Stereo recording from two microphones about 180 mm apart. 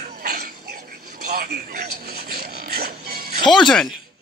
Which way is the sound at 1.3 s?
55° right (ahead or behind).